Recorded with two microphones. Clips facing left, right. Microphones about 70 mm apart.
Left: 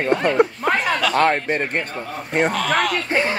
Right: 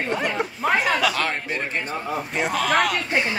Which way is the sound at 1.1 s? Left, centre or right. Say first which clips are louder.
Left 8 dB; left.